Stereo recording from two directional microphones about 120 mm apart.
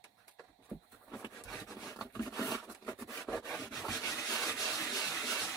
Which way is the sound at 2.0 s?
25° left (ahead or behind).